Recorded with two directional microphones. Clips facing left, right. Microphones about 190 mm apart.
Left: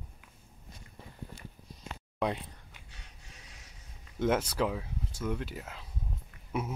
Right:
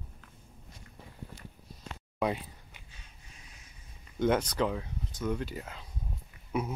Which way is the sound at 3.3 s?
90° left.